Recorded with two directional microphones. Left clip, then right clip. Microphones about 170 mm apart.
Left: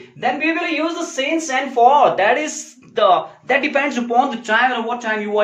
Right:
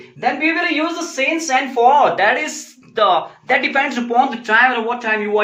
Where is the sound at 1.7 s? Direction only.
25° left (ahead or behind).